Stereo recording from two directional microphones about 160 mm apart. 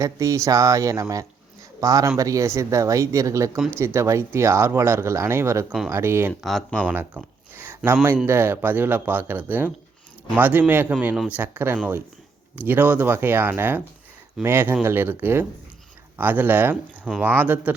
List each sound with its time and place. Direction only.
0.0 s speech: 20° right (ahead or behind)
6.4 s speech: 5° left (ahead or behind)
6.8 s speech: 10° right (ahead or behind)